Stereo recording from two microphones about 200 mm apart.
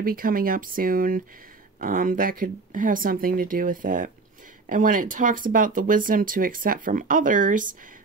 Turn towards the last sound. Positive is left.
turn(degrees=-40)  # may be behind; listen again after turning